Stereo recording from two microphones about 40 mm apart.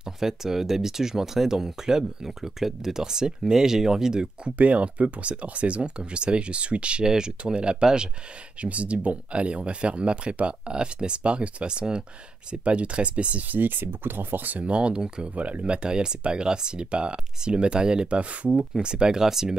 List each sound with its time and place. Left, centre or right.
0.0 s speech: centre
4.6 s speech: right
7.1 s speech: centre
8.5 s speech: right
13.5 s speech: right
14.6 s speech: right
15.3 s speech: right
18.8 s speech: right